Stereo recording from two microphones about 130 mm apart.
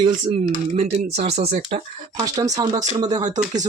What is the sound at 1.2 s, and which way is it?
Speech, 50° right (ahead or behind).